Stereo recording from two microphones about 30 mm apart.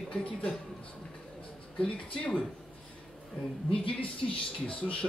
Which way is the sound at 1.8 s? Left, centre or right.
Left.